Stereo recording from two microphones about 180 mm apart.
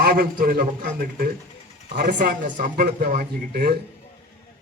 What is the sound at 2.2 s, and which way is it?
A man's voice, 50° right (ahead or behind).